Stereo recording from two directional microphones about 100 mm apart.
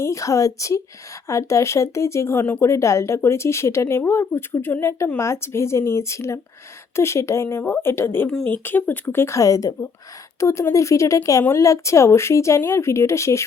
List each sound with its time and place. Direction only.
0.0 s speech: 30° left (ahead or behind)